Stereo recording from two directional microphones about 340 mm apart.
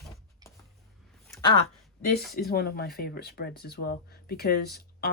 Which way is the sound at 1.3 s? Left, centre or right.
Centre.